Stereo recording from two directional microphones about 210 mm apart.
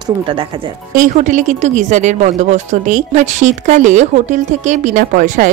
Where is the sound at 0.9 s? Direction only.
35° right (ahead or behind).